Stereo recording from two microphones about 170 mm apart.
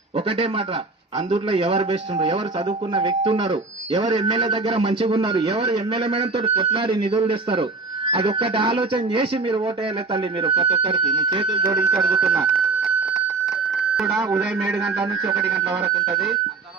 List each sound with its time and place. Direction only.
0.3 s speech: 35° right (ahead or behind)
11.8 s speech: 10° right (ahead or behind)
12.2 s speech: 30° right (ahead or behind)
13.4 s a sound: centre (ahead or behind)
14.3 s speech: centre (ahead or behind)
16.1 s speech: centre (ahead or behind)